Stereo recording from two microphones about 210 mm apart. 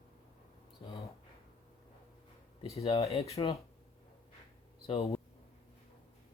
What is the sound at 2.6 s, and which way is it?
Speech, 30° left (ahead or behind).